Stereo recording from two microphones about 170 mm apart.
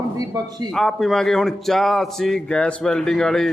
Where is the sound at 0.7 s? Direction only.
Centre (ahead or behind).